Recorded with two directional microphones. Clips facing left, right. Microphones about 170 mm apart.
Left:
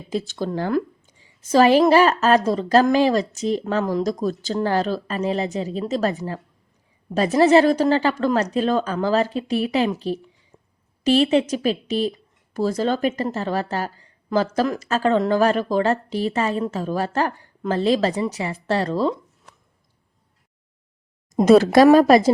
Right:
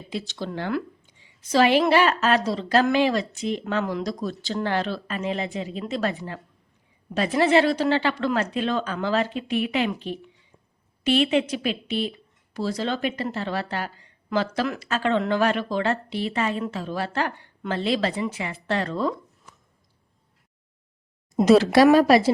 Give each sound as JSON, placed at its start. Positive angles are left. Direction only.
{"t": 0.1, "sound": "a woman's voice", "side_deg": 45}
{"t": 10.5, "sound": "a sound", "side_deg": 45}
{"t": 11.0, "sound": "a woman's voice", "side_deg": 35}
{"t": 21.3, "sound": "speech", "side_deg": 50}